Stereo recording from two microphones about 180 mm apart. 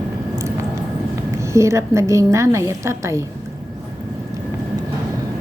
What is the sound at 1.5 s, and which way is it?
A woman's voice, 15° right (ahead or behind).